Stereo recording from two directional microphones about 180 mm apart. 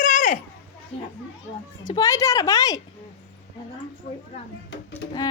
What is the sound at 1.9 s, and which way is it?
Speech, 20° left (ahead or behind).